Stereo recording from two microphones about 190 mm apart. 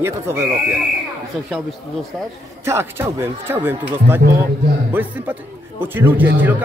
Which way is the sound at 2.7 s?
10° right (ahead or behind).